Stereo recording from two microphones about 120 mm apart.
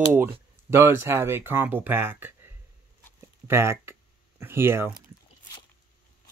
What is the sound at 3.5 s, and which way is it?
Speech, 20° right (ahead or behind).